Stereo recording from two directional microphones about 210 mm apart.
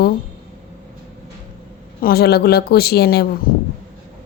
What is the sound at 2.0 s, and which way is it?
Speech, 50° left (ahead or behind).